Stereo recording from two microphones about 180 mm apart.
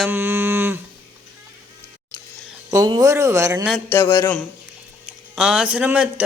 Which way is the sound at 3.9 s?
15° left (ahead or behind).